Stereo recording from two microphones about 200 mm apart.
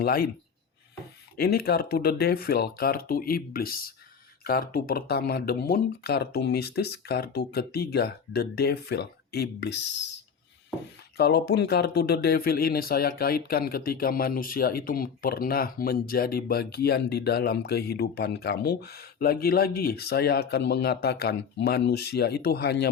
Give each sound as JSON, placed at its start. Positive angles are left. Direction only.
{"t": 0.0, "sound": "speech", "side_deg": 50}
{"t": 1.4, "sound": "speech", "side_deg": 50}
{"t": 11.2, "sound": "speech", "side_deg": 50}